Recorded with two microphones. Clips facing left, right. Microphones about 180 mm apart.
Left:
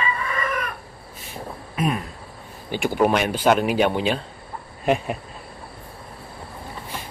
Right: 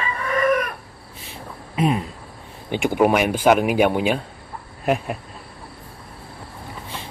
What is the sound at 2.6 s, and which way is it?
Speech, 20° right (ahead or behind).